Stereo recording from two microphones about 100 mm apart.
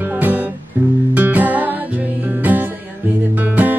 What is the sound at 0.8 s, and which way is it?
Guitar, 20° right (ahead or behind).